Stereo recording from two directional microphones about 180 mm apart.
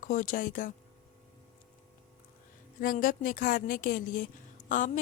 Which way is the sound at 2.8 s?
50° left (ahead or behind).